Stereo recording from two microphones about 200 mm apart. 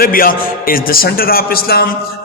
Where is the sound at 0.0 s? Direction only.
45° left (ahead or behind).